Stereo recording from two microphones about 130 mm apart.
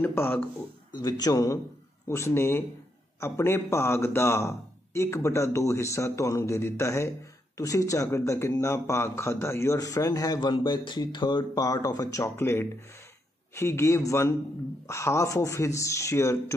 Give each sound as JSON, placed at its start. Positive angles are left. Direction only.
{"t": 0.0, "sound": "speech", "side_deg": 15}
{"t": 0.9, "sound": "speech", "side_deg": 30}